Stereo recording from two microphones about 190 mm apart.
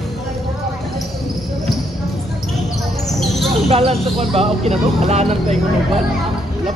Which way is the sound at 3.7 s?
30° right (ahead or behind).